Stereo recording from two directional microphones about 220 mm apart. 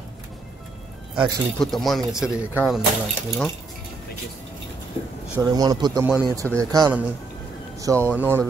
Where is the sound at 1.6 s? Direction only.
Centre (ahead or behind).